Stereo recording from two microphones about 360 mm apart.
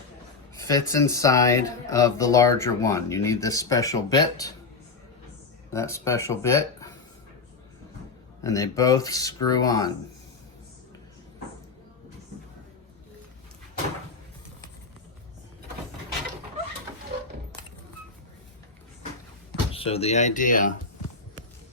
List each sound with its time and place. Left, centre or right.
0.5 s speech: centre
5.7 s speech: centre
8.4 s speech: centre
19.7 s speech: centre